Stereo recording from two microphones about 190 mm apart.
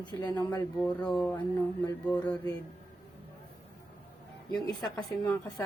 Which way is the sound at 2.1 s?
5° left (ahead or behind).